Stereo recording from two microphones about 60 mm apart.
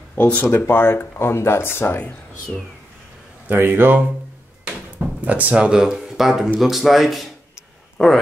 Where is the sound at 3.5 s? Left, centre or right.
Right.